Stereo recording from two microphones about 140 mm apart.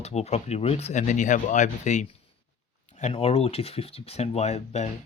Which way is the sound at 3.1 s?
45° left (ahead or behind).